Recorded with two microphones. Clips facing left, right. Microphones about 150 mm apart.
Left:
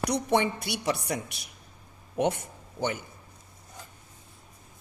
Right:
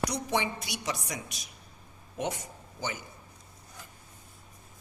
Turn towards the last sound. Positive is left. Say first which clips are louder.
# left 6 dB
turn(degrees=60)  # may be behind; listen again after turning